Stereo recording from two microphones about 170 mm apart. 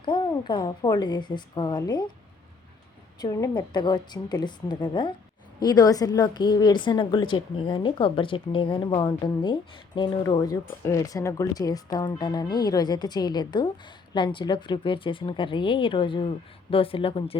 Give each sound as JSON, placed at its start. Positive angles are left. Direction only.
{"t": 0.0, "sound": "a woman's voice", "side_deg": 25}
{"t": 3.2, "sound": "a woman's voice", "side_deg": 20}